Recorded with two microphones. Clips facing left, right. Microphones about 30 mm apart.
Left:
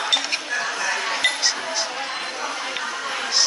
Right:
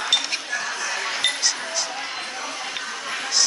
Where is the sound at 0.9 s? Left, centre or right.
Centre.